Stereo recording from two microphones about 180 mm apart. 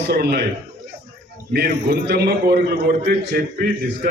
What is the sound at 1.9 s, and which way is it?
A man's voice, 65° right (ahead or behind).